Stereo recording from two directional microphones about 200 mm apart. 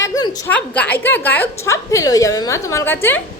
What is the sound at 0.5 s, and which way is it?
A woman's voice, 5° left (ahead or behind).